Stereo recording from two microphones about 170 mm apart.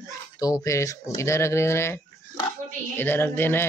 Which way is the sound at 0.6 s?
20° left (ahead or behind).